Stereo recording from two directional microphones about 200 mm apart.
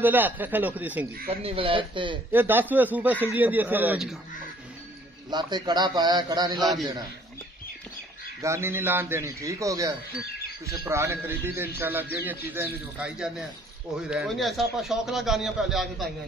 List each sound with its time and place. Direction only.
0.0 s speech: 10° right (ahead or behind)
1.3 s a man's voice: 30° right (ahead or behind)
2.3 s speech: 10° right (ahead or behind)
5.3 s a man's voice: 20° right (ahead or behind)
6.6 s a man's voice: centre (ahead or behind)
8.4 s a man's voice: 15° right (ahead or behind)